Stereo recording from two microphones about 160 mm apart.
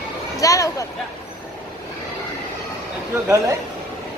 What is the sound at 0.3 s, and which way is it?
Speech, 20° left (ahead or behind).